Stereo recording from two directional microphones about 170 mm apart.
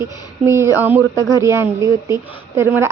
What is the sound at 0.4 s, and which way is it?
Speech, 15° right (ahead or behind).